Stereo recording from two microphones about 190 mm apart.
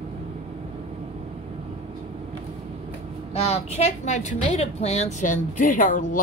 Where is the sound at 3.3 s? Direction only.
30° left (ahead or behind).